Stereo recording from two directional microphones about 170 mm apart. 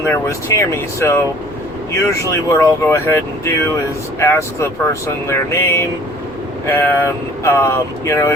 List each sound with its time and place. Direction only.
0.1 s speech: 20° left (ahead or behind)